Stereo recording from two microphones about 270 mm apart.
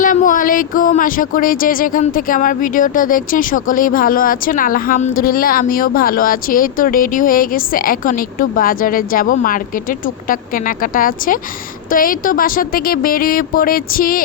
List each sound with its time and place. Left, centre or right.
0.0 s speech: left
10.9 s speech: left